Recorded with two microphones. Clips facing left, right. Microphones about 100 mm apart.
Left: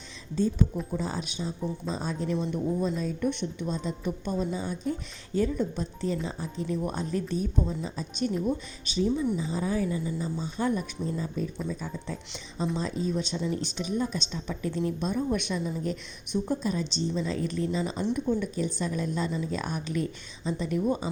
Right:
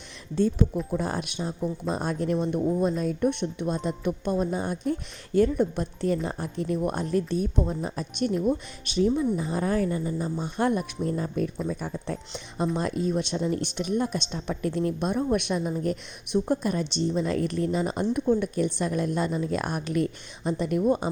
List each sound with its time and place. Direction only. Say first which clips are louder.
0.9 s speech: right 3 dB; 55° right (ahead or behind)